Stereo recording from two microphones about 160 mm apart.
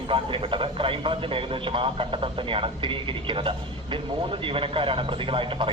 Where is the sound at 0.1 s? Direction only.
35° right (ahead or behind).